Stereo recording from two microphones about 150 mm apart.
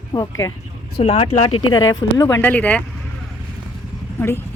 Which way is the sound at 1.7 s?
25° left (ahead or behind).